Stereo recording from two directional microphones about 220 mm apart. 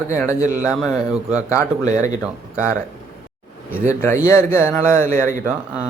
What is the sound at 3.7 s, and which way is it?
Speech, 10° left (ahead or behind).